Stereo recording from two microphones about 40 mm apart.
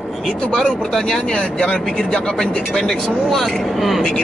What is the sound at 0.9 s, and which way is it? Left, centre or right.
A man's voice, centre.